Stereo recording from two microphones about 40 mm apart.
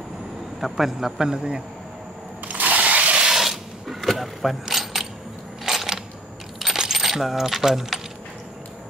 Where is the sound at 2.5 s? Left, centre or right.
Right.